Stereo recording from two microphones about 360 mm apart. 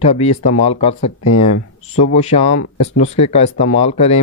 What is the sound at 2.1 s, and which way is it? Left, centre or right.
Speech, centre.